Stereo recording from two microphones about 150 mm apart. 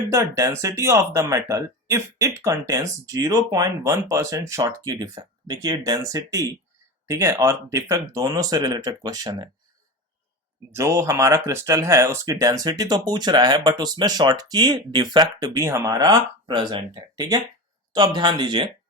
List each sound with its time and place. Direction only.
0.1 s speech: 20° right (ahead or behind)
10.7 s speech: 20° right (ahead or behind)